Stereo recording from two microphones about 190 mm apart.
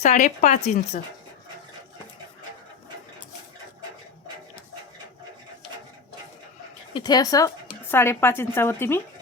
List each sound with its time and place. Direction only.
0.0 s speech: 40° left (ahead or behind)
6.9 s speech: 20° left (ahead or behind)